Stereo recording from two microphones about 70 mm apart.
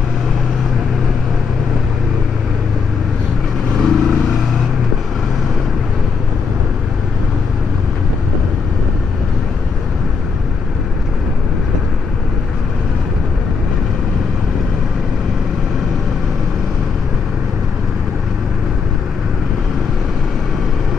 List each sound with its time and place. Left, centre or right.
3.8 s vehicle: centre